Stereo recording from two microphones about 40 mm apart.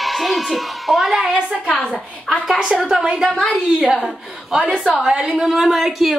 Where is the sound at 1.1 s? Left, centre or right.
Centre.